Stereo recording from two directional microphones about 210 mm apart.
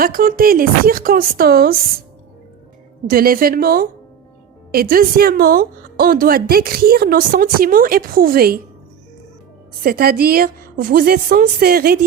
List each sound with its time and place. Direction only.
0.0 s a woman's voice: 45° right (ahead or behind)
3.1 s a woman's voice: 45° right (ahead or behind)
9.8 s a woman's voice: 45° right (ahead or behind)